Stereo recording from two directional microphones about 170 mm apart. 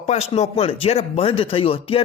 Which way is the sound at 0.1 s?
40° left (ahead or behind).